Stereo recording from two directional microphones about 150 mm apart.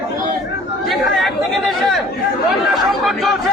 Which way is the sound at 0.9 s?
Centre (ahead or behind).